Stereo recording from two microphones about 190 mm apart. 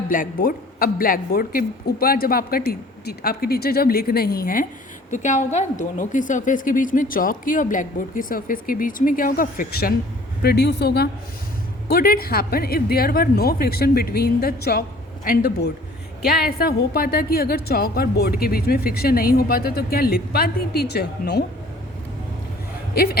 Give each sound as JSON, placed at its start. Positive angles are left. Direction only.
{"t": 0.1, "sound": "a woman's voice", "side_deg": 45}
{"t": 10.4, "sound": "a woman's voice", "side_deg": 60}